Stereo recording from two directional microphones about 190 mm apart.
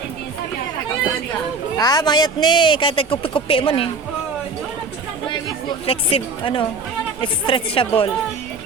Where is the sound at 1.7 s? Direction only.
20° left (ahead or behind).